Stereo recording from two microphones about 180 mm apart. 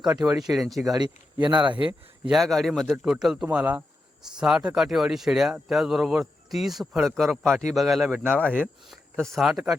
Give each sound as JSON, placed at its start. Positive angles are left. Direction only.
{"t": 0.0, "sound": "speech", "side_deg": -5}
{"t": 0.9, "sound": "speech", "side_deg": -25}
{"t": 2.2, "sound": "speech", "side_deg": 0}